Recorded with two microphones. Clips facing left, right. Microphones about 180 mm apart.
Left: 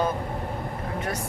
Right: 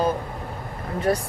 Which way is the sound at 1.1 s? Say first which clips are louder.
Right 12 dB; 35° right (ahead or behind).